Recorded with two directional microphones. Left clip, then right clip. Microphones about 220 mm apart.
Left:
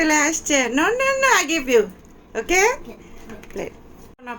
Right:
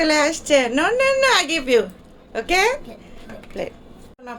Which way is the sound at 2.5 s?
10° right (ahead or behind).